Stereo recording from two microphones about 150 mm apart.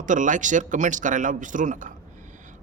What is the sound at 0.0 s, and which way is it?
A man's voice, 55° right (ahead or behind).